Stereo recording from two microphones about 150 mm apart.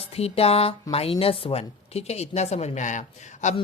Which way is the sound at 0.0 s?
40° left (ahead or behind).